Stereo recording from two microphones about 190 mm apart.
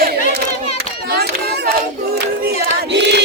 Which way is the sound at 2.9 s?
65° right (ahead or behind).